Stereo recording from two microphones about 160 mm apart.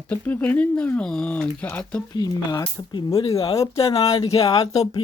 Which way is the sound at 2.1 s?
25° left (ahead or behind).